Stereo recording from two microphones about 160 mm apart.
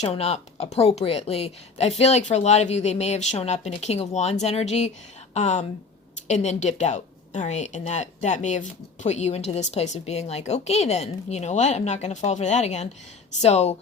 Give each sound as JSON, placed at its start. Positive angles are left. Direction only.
{"t": 0.0, "sound": "a woman's voice", "side_deg": 40}